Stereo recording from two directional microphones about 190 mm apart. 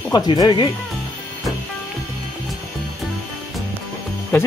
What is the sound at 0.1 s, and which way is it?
Speech, 20° left (ahead or behind).